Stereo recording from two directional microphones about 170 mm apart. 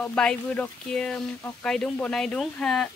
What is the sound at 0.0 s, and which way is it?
Speech, 5° left (ahead or behind).